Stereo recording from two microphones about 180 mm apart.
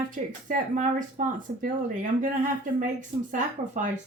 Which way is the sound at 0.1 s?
45° right (ahead or behind).